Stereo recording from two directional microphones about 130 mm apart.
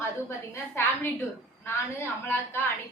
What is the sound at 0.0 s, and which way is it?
Speech, 20° left (ahead or behind).